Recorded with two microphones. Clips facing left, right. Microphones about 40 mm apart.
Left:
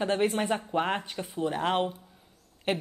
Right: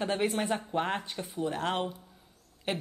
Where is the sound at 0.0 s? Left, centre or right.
Centre.